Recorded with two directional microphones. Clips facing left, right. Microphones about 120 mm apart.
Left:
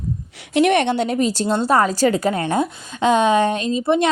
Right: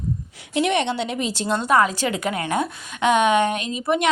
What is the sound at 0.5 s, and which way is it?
A woman's voice, 55° left (ahead or behind).